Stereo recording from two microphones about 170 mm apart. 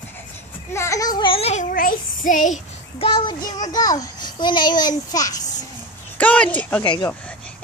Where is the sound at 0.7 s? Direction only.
20° left (ahead or behind); by 1.7 s 40° left (ahead or behind).